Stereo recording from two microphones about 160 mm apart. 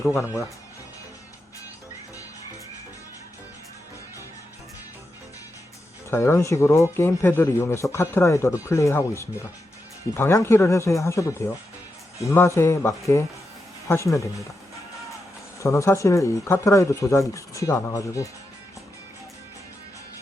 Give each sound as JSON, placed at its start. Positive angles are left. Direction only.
{"t": 0.0, "sound": "speech", "side_deg": 20}
{"t": 6.1, "sound": "speech", "side_deg": 15}
{"t": 15.6, "sound": "speech", "side_deg": 20}